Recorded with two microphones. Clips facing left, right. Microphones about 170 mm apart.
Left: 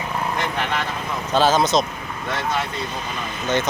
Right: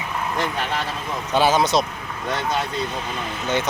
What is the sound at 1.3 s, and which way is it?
Speech, 15° right (ahead or behind).